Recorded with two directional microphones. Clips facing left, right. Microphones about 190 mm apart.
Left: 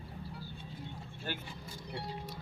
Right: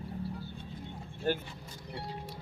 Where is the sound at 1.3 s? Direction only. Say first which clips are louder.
Right 10 dB; 45° right (ahead or behind).